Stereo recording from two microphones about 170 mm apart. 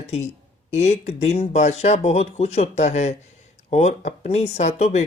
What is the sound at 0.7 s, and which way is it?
Speech, 40° left (ahead or behind).